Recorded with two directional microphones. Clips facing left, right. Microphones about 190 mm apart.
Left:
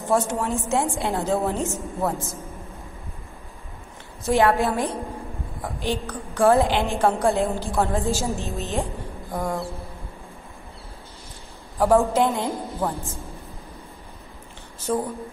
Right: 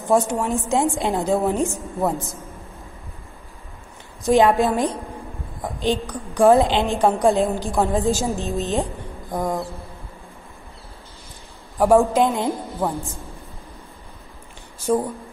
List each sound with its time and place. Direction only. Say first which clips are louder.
0.3 s a woman's voice: right 2 dB; 15° right (ahead or behind)
4.2 s a woman's voice: right 4 dB; 15° right (ahead or behind)
11.8 s a woman's voice: right 3 dB; 15° right (ahead or behind)
14.9 s a woman's voice: right 4 dB; 10° right (ahead or behind)